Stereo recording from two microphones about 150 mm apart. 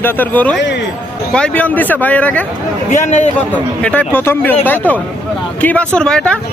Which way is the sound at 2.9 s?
55° left (ahead or behind).